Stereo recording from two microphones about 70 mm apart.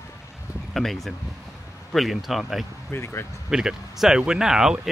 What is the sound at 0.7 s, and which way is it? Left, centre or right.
Speech, centre.